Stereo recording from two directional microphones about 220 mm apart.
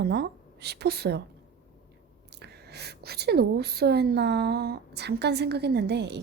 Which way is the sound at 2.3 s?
50° right (ahead or behind).